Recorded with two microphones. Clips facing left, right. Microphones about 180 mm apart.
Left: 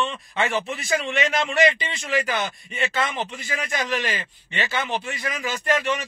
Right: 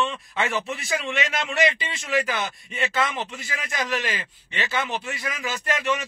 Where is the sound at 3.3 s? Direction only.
50° left (ahead or behind).